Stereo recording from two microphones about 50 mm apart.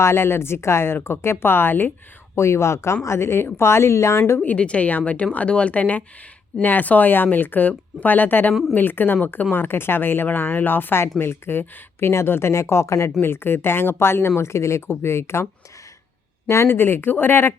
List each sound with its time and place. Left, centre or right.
0.0 s speech: left
2.3 s speech: left
4.4 s a woman's voice: left
13.2 s speech: left
16.5 s speech: left